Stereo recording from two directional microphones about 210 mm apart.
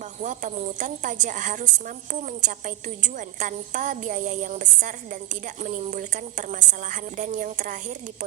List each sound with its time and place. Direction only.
0.2 s a woman's voice: 40° right (ahead or behind)